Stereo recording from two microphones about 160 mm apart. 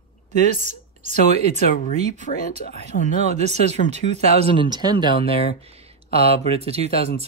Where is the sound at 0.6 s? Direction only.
45° right (ahead or behind).